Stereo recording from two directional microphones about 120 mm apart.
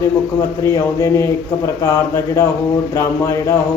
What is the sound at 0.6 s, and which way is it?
A man's voice, 25° left (ahead or behind).